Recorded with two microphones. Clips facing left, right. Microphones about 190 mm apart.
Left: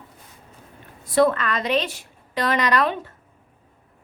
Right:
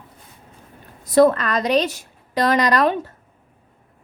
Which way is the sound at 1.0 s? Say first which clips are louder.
Right 4 dB; 40° right (ahead or behind).